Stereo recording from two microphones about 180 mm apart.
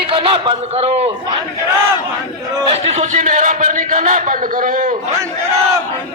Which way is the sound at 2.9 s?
40° right (ahead or behind).